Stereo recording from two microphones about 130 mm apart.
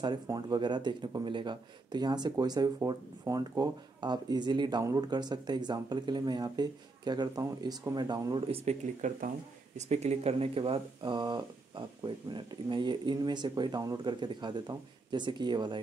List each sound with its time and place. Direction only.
0.0 s speech: 30° right (ahead or behind)
8.5 s speech: 55° right (ahead or behind); by 15.8 s 35° right (ahead or behind)